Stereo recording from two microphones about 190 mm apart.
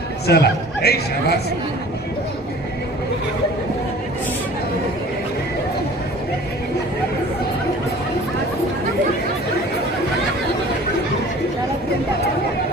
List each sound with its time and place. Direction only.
0.3 s speech: 55° left (ahead or behind)